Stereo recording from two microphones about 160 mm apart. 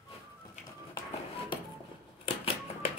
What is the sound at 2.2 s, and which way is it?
Typewriter, 40° left (ahead or behind).